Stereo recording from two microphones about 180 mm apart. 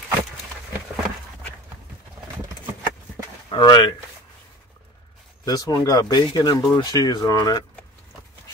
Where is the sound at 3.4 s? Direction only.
25° left (ahead or behind).